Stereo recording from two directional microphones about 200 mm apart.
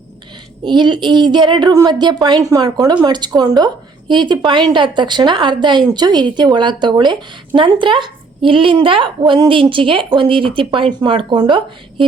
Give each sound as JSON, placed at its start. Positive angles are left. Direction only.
{"t": 0.6, "sound": "speech", "side_deg": -20}